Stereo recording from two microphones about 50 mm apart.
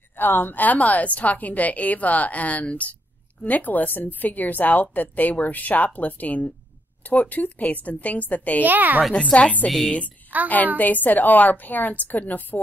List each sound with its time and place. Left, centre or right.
0.2 s a woman's voice: left
8.6 s speech: right
9.1 s a woman's voice: left
9.7 s a woman's voice: centre
10.3 s speech: right
10.8 s a woman's voice: left